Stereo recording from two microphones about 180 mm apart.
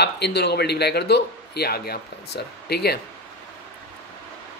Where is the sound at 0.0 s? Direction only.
65° left (ahead or behind).